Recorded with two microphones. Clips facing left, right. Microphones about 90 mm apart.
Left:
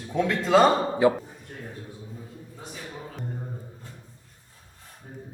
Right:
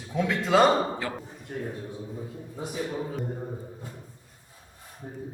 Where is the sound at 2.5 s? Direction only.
10° right (ahead or behind).